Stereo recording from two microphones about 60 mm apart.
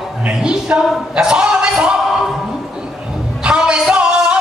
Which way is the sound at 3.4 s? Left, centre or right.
Centre.